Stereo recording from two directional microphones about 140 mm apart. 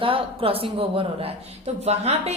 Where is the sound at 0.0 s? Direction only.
40° right (ahead or behind).